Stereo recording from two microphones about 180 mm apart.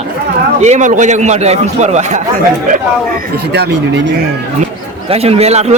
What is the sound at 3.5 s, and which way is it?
Speech, 75° right (ahead or behind).